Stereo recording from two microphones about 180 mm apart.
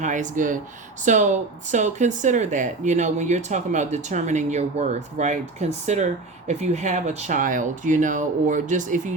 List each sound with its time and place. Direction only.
0.0 s speech: 45° right (ahead or behind)